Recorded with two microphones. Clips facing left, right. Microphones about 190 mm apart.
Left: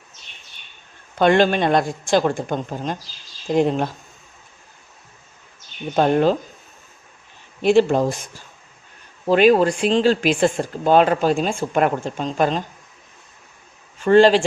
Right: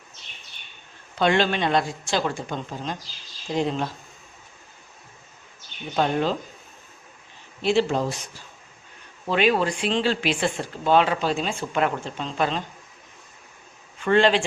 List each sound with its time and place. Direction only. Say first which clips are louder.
1.2 s speech: left 6 dB; 50° left (ahead or behind)
6.0 s speech: left 7 dB; 50° left (ahead or behind)
7.6 s speech: left 6 dB; 50° left (ahead or behind)
9.2 s speech: left 7 dB; 45° left (ahead or behind)
14.0 s speech: left 6 dB; 40° left (ahead or behind)